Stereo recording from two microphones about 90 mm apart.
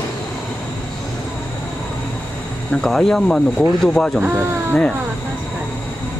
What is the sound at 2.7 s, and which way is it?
Speech, 10° left (ahead or behind).